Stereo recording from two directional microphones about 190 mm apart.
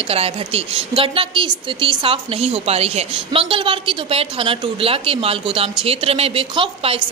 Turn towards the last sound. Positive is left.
turn(degrees=-30)  # may be behind; listen again after turning